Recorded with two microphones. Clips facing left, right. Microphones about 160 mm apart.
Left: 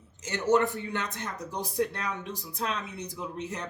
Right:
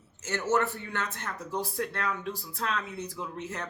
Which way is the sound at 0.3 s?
15° left (ahead or behind).